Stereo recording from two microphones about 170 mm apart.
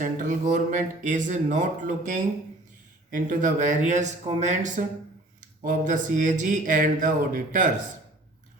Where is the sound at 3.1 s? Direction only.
50° right (ahead or behind).